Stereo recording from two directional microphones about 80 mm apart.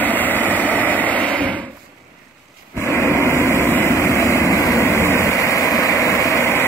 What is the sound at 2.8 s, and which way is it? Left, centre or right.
Vehicle, left.